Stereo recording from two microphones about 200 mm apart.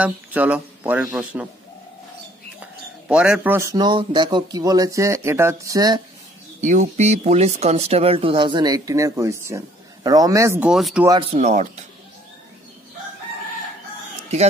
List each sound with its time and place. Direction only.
0.0 s speech: 5° right (ahead or behind)
2.6 s speech: 5° right (ahead or behind)
6.6 s speech: 40° right (ahead or behind); by 11.1 s centre (ahead or behind)
11.1 s speech: 25° right (ahead or behind)